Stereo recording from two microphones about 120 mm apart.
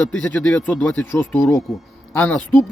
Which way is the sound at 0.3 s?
15° left (ahead or behind).